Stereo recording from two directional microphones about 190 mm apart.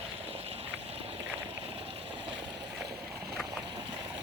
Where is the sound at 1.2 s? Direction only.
10° right (ahead or behind).